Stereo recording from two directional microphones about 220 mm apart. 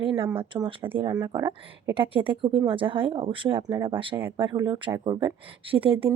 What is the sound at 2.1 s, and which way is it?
Speech, 25° right (ahead or behind).